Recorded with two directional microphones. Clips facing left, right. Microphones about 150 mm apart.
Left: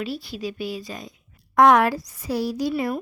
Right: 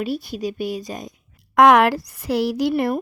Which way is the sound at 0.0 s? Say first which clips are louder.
Right 4 dB; 50° right (ahead or behind).